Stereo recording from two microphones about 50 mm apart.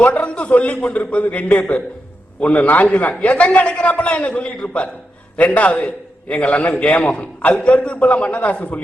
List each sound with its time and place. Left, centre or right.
0.0 s a man's voice: left